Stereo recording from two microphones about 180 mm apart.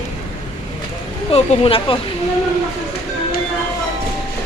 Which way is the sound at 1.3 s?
35° left (ahead or behind).